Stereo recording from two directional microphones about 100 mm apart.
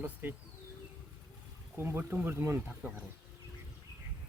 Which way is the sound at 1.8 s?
20° right (ahead or behind).